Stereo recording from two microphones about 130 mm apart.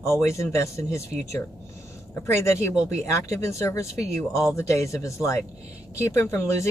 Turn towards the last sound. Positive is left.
turn(degrees=25)  # may be behind; listen again after turning